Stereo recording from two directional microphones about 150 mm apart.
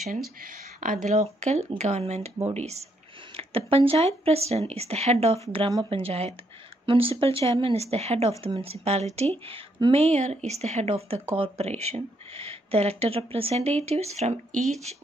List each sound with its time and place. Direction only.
0.1 s speech: 65° right (ahead or behind); by 10.0 s 35° right (ahead or behind)
10.0 s speech: 50° right (ahead or behind)